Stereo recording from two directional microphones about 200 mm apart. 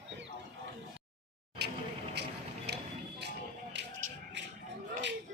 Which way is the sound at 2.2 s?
55° right (ahead or behind).